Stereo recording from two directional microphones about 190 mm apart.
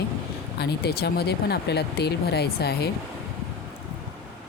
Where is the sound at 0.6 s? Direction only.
55° left (ahead or behind).